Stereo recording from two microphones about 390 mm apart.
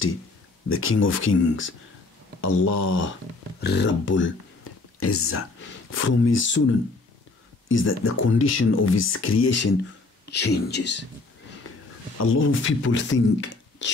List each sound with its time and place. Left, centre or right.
0.7 s speech: left
2.4 s speech: left
3.6 s speech: left
12.3 s speech: left